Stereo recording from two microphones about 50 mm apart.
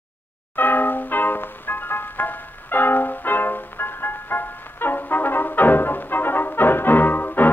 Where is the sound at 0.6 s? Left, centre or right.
Left.